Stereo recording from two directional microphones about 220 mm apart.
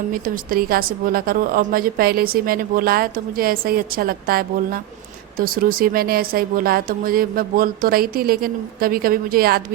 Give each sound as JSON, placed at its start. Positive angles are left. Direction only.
{"t": 0.1, "sound": "a woman's voice", "side_deg": -40}